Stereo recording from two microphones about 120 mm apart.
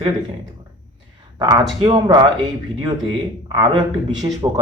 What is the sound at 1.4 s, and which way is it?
Speech, 35° right (ahead or behind).